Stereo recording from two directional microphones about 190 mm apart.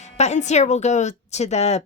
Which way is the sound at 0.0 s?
35° left (ahead or behind).